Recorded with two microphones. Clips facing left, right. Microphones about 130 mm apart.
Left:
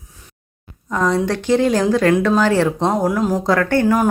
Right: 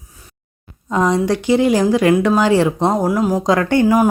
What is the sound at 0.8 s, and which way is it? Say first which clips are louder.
Speech: right 2 dB; 20° right (ahead or behind).